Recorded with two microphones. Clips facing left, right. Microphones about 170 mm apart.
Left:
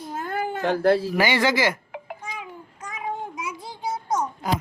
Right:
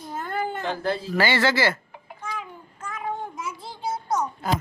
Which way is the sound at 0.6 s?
65° left (ahead or behind).